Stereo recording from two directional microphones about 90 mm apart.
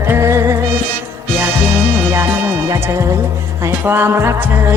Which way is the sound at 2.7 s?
35° right (ahead or behind).